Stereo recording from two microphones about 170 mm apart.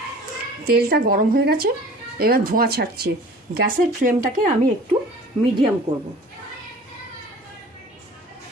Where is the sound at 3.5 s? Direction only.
50° right (ahead or behind).